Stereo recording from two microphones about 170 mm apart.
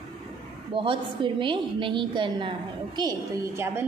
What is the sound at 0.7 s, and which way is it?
A woman's voice, 30° right (ahead or behind).